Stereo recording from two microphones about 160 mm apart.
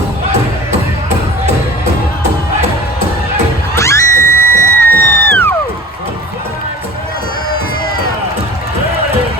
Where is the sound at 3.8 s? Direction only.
20° left (ahead or behind).